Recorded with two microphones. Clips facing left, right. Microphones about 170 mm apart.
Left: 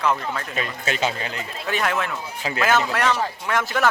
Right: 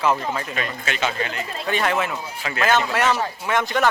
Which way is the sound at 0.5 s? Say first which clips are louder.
Left 1 dB; 35° left (ahead or behind).